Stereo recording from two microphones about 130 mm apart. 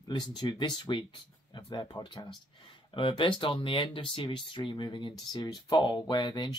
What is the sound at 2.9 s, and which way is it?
Speech, 40° left (ahead or behind).